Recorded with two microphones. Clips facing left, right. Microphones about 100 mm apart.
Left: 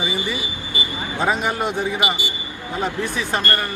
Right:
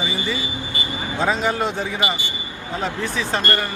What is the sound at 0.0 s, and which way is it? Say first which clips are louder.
Speech: even; 15° left (ahead or behind).